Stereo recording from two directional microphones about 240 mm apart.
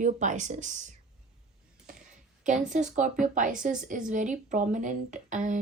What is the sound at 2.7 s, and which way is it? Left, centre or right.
Speech, right.